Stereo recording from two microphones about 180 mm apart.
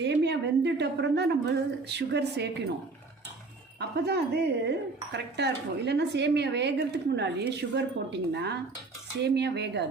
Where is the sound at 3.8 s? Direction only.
65° right (ahead or behind).